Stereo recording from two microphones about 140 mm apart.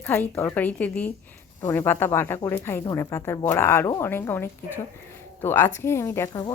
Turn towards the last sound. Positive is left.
turn(degrees=20)  # may be behind; listen again after turning